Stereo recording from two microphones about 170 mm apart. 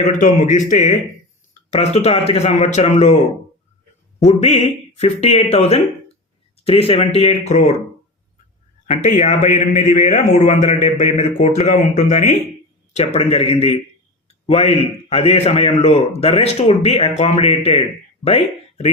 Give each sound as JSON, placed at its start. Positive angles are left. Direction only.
{"t": 0.1, "sound": "a man's voice", "side_deg": 50}
{"t": 4.3, "sound": "a man's voice", "side_deg": 40}
{"t": 8.9, "sound": "a man's voice", "side_deg": 45}
{"t": 14.3, "sound": "a sound", "side_deg": 35}
{"t": 15.1, "sound": "a man's voice", "side_deg": 35}